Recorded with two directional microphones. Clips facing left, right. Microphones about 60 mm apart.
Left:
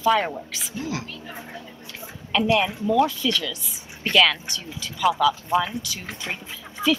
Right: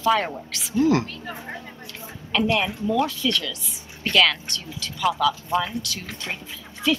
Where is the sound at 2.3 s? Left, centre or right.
Centre.